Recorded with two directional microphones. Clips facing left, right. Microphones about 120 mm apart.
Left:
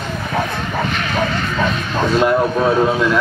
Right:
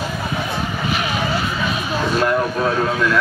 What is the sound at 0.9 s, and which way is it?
Vehicle, 10° right (ahead or behind).